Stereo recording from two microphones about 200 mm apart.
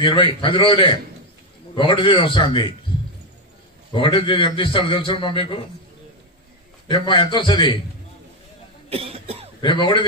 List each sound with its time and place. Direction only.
0.0 s a man's voice: 25° left (ahead or behind)
3.9 s a man's voice: 25° left (ahead or behind)
6.9 s a man's voice: 25° left (ahead or behind)
8.8 s cough: 30° right (ahead or behind)
9.6 s a man's voice: 25° left (ahead or behind)